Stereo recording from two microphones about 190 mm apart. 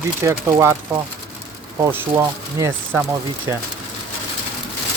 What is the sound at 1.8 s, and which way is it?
Speech, 15° right (ahead or behind).